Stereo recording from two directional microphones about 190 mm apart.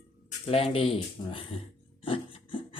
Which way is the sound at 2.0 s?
25° left (ahead or behind).